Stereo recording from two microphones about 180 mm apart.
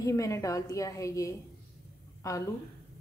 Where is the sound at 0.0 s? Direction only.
20° left (ahead or behind).